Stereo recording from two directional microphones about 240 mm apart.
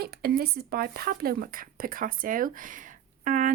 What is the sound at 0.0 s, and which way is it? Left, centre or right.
Speech, right.